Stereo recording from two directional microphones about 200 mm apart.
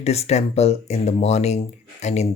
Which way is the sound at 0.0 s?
30° left (ahead or behind).